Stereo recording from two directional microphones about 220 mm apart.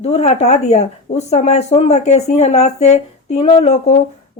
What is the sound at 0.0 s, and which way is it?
Speech, 30° left (ahead or behind).